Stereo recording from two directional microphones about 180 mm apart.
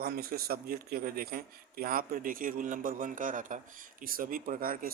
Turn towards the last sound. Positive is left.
turn(degrees=-50)  # may be behind; listen again after turning